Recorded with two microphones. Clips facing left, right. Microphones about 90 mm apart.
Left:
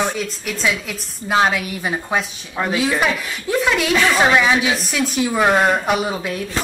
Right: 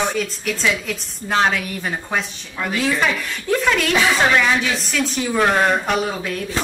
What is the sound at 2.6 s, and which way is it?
Speech, 35° left (ahead or behind).